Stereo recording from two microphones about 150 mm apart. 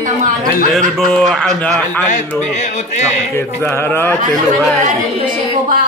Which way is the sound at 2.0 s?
55° left (ahead or behind).